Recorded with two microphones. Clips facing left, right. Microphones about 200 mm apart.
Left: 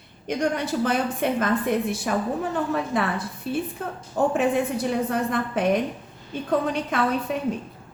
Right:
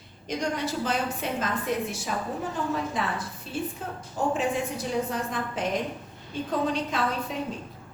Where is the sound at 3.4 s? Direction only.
60° left (ahead or behind).